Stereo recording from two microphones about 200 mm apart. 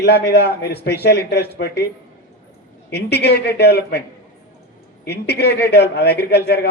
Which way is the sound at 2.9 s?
55° left (ahead or behind).